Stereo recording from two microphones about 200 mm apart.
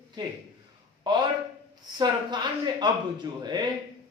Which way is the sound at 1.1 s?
20° right (ahead or behind).